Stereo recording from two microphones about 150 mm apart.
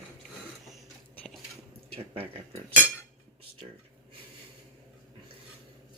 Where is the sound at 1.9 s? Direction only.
40° right (ahead or behind).